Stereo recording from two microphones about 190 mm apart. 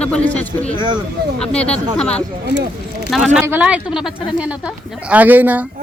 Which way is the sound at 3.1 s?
Centre (ahead or behind).